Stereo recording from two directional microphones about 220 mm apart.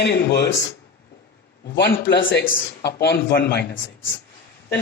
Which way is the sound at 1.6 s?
50° left (ahead or behind).